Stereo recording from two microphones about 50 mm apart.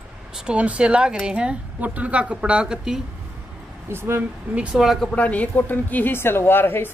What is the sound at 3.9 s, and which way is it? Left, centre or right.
Speech, right.